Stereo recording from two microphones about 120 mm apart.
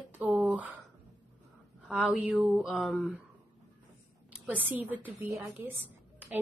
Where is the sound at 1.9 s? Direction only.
10° right (ahead or behind).